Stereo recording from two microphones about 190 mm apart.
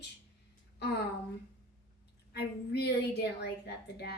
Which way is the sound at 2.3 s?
60° left (ahead or behind).